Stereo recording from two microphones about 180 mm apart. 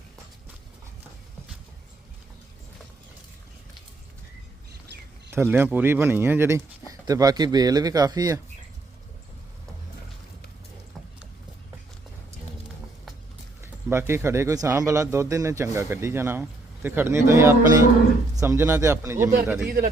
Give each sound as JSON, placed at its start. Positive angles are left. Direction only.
{"t": 5.3, "sound": "speech", "side_deg": -10}
{"t": 13.9, "sound": "speech", "side_deg": -15}
{"t": 19.6, "sound": "speech", "side_deg": -55}